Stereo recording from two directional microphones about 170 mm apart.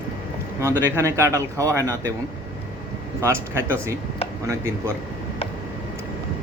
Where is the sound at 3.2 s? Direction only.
15° right (ahead or behind).